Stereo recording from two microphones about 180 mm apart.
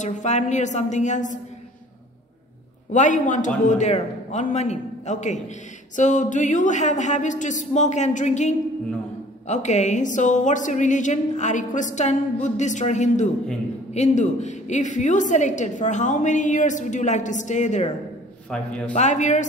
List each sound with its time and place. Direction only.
0.0 s a man's voice: 40° left (ahead or behind)
2.9 s a man's voice: 45° left (ahead or behind)
18.5 s a man's voice: 5° left (ahead or behind)
18.9 s a man's voice: 40° left (ahead or behind)